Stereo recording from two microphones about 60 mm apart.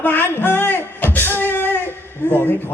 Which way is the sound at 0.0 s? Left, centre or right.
Left.